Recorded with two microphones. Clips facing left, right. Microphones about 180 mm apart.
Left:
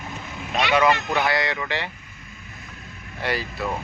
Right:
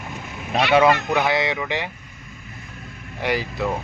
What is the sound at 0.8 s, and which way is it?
Speech, 25° right (ahead or behind).